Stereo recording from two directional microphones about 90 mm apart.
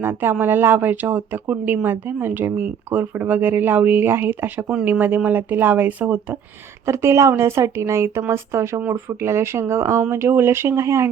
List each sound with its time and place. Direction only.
0.0 s speech: 25° right (ahead or behind)
6.8 s a woman's voice: 30° right (ahead or behind)